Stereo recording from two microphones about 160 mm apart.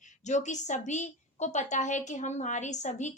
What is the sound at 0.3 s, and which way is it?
A woman's voice, 50° left (ahead or behind).